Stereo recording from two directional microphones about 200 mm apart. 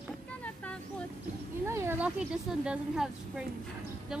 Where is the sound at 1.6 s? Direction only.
15° right (ahead or behind).